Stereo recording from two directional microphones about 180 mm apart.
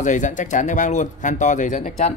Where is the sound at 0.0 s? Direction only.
45° left (ahead or behind).